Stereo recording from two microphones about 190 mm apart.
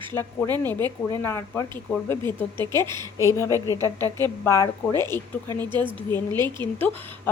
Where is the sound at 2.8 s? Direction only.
20° right (ahead or behind).